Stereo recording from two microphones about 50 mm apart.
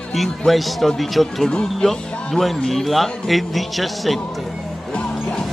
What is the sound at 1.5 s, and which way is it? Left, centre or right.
Speech, left.